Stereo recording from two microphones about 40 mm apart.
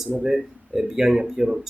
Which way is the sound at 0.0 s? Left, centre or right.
Centre.